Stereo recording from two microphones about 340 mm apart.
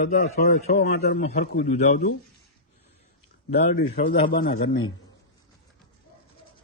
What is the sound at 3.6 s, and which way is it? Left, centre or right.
A man's voice, left.